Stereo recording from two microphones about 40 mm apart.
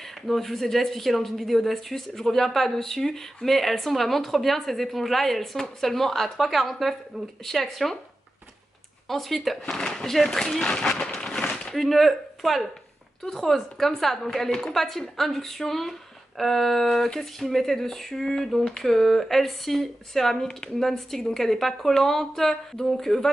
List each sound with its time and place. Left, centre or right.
0.3 s a woman's voice: centre
9.1 s speech: centre
10.6 s speech: centre
11.1 s a sound: centre
11.7 s a woman's voice: centre